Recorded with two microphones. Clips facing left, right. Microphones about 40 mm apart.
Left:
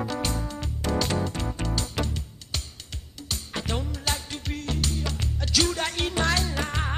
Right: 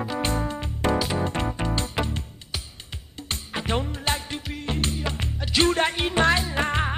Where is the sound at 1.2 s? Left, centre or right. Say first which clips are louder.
Right 4 dB; right.